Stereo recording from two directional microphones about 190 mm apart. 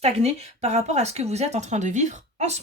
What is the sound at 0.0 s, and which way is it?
A woman's voice, 35° right (ahead or behind).